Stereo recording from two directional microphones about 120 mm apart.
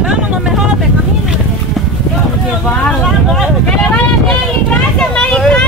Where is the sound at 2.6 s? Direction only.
10° left (ahead or behind).